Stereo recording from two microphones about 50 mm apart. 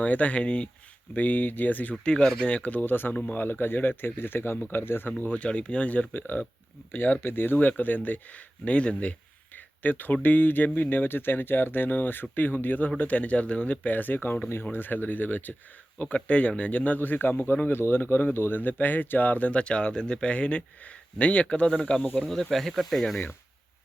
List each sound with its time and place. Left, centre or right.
0.0 s speech: left
1.1 s speech: left
2.0 s speech: left
5.2 s speech: left
9.8 s speech: left
17.0 s speech: left; by 22.0 s centre
22.3 s speech: centre